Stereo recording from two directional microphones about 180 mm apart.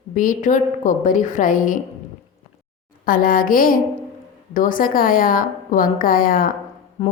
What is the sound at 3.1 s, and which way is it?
A woman's voice, 50° left (ahead or behind).